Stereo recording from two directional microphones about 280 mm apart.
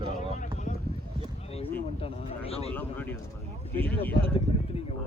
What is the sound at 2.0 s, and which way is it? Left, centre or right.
Speech, left.